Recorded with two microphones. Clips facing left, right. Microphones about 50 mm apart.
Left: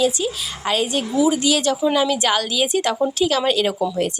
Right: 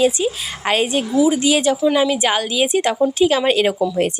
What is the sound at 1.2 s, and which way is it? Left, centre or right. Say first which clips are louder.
A woman's voice: right 2 dB; centre.